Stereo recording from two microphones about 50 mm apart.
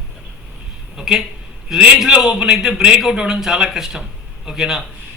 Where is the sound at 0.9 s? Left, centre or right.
Centre.